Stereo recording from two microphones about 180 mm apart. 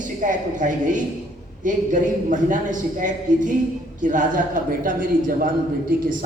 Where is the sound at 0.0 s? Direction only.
45° right (ahead or behind).